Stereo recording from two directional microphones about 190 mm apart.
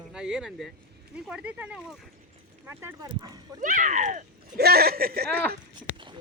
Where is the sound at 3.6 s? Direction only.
45° right (ahead or behind).